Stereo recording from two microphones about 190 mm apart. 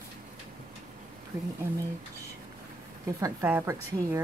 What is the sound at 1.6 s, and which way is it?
Speech, 15° right (ahead or behind).